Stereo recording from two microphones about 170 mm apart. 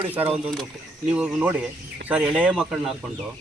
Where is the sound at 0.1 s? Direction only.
10° right (ahead or behind).